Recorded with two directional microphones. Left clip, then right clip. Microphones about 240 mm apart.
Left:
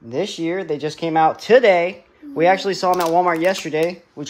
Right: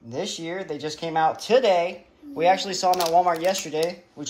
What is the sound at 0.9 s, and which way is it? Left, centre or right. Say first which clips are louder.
Speech: left 6 dB; left.